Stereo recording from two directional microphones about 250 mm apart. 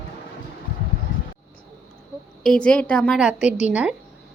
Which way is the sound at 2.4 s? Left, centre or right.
Centre.